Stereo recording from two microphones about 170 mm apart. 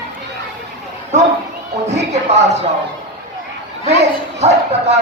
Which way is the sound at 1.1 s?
40° right (ahead or behind).